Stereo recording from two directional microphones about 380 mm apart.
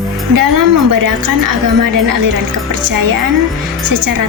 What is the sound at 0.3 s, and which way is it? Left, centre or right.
A woman's voice, right.